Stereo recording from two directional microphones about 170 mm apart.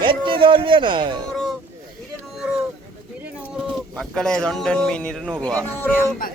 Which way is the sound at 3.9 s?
5° left (ahead or behind).